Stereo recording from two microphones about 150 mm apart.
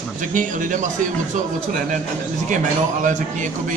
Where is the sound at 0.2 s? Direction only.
60° right (ahead or behind).